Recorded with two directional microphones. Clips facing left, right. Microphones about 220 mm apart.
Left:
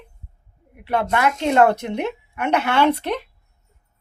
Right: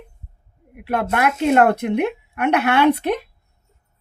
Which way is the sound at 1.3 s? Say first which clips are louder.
Right 3 dB; 5° right (ahead or behind).